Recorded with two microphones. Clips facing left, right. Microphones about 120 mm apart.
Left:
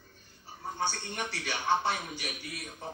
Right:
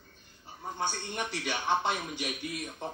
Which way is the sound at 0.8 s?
15° right (ahead or behind).